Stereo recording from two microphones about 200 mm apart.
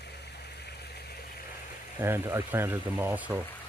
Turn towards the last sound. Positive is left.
turn(degrees=-10)  # may be behind; listen again after turning